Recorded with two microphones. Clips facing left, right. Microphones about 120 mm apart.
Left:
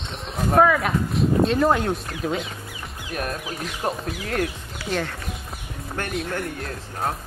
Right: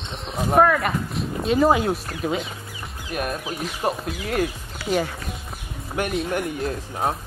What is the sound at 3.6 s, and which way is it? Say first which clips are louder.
Speech: right 2 dB; centre (ahead or behind).